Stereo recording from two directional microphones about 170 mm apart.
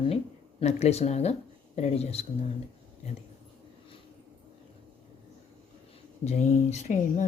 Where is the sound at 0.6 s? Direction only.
40° left (ahead or behind).